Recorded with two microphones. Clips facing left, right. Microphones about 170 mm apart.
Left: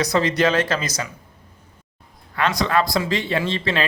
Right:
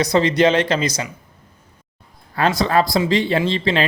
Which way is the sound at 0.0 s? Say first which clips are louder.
Right 4 dB; 25° right (ahead or behind).